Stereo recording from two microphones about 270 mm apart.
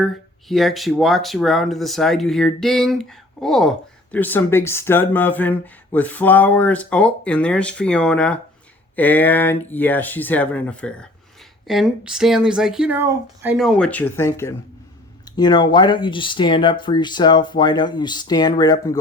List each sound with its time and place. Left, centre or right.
0.0 s speech: centre